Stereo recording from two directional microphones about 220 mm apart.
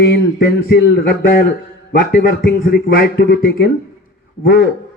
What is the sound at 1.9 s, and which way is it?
A man's voice, 40° left (ahead or behind).